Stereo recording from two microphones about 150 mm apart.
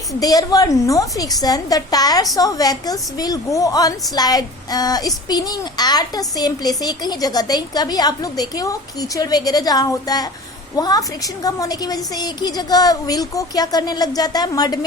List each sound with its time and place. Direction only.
0.2 s a woman's voice: 25° left (ahead or behind)